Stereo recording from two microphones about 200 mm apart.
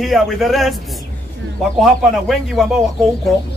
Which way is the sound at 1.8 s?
Centre (ahead or behind).